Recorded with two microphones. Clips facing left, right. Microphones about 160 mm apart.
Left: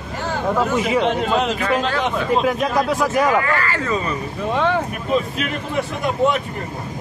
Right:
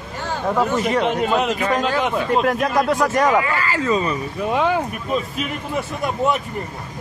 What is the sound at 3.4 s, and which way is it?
Speech, 15° right (ahead or behind).